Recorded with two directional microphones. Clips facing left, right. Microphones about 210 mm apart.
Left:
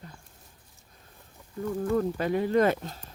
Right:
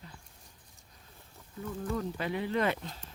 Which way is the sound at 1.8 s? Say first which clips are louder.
Left 7 dB; 45° left (ahead or behind).